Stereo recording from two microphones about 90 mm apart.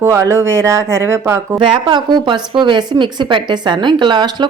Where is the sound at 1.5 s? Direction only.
60° right (ahead or behind).